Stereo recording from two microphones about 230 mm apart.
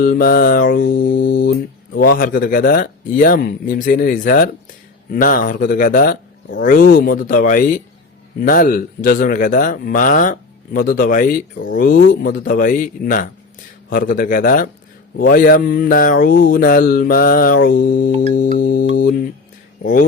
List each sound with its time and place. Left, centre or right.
0.0 s speech: left
1.0 s mantra: left
2.1 s speech: left